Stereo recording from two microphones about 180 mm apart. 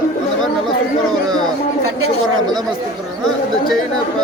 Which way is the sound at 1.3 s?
20° right (ahead or behind).